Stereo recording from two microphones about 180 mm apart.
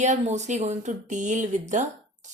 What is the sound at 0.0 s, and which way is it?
Speech, 40° right (ahead or behind).